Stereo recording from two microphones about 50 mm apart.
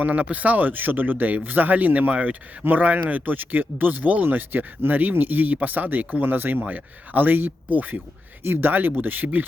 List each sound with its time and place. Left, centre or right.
0.0 s speech: right
8.4 s speech: right